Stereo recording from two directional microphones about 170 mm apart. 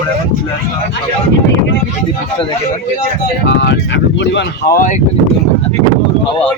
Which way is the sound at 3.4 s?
90° left.